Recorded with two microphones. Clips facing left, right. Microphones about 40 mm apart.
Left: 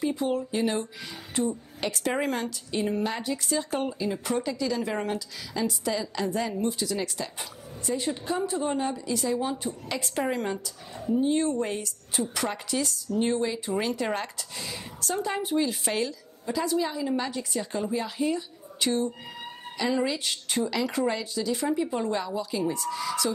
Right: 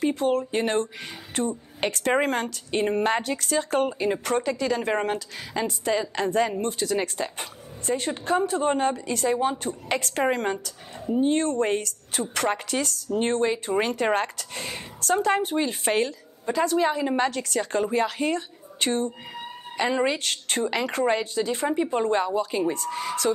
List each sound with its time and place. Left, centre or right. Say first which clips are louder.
0.0 s a woman's voice: right 4 dB; right
3.2 s a woman's voice: right 3 dB; right
9.6 s speech: right 4 dB; right
15.5 s a woman's voice: right 3 dB; right
17.3 s a woman's voice: right 3 dB; right
17.9 s speech: right 1 dB; right
18.8 s a woman's voice: right 1 dB; right
20.2 s speech: right 2 dB; right
20.6 s a woman's voice: right 3 dB; right